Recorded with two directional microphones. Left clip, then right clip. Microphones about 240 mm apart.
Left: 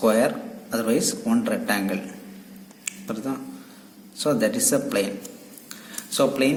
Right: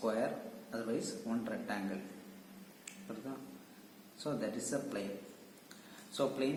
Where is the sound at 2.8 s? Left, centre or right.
Left.